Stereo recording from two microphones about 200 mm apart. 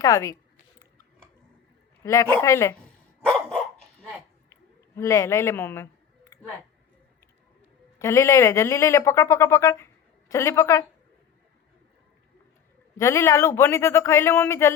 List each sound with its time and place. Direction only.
0.0 s a sound: 15° left (ahead or behind)
2.0 s speech: 15° left (ahead or behind)
3.2 s dog: 5° left (ahead or behind)
4.9 s speech: 15° left (ahead or behind)
7.9 s speech: 15° left (ahead or behind)
13.0 s speech: 15° left (ahead or behind)